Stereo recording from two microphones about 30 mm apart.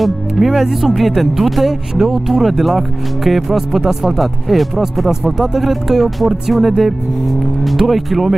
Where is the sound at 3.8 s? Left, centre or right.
Centre.